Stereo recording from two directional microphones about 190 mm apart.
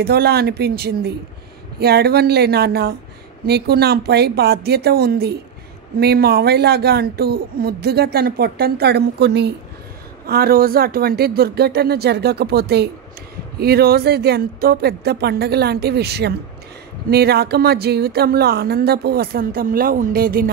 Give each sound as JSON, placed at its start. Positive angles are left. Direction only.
{"t": 0.0, "sound": "speech", "side_deg": -55}